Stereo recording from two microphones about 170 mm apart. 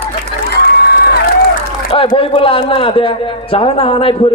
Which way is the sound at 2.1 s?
30° left (ahead or behind).